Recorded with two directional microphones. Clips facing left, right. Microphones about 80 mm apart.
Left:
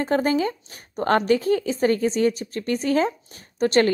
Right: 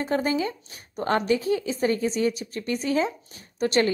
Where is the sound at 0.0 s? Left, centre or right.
Left.